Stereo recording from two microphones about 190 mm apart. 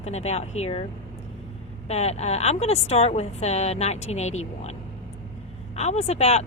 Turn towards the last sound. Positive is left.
turn(degrees=35)  # may be behind; listen again after turning